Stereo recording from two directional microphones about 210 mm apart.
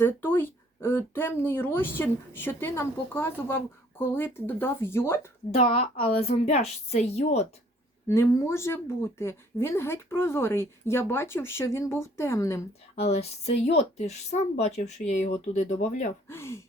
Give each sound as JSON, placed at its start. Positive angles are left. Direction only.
{"t": 0.0, "sound": "speech", "side_deg": 10}
{"t": 5.5, "sound": "a woman's voice", "side_deg": 25}
{"t": 8.0, "sound": "speech", "side_deg": 15}
{"t": 13.0, "sound": "speech", "side_deg": 30}
{"t": 16.3, "sound": "speech", "side_deg": 10}